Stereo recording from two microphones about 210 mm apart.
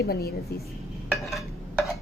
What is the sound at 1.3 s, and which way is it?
Stir, centre (ahead or behind).